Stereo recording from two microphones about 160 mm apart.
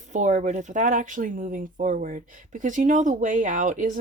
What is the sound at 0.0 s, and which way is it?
Speech, 50° right (ahead or behind).